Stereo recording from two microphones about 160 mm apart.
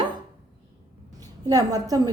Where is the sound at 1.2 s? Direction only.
20° right (ahead or behind).